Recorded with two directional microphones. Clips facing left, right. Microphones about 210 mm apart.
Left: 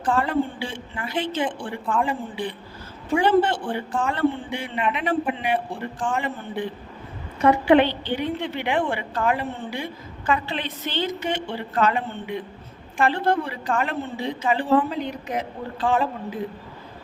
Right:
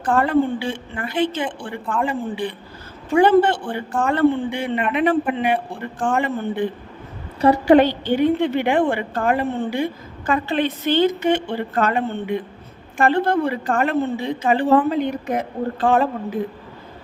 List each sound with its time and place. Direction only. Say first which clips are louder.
0.1 s a man's voice: right 5 dB; 55° right (ahead or behind)
1.5 s a woman's voice: even; centre (ahead or behind)
3.2 s a man's voice: right 5 dB; 55° right (ahead or behind)
7.4 s a woman's voice: right 3 dB; 40° right (ahead or behind)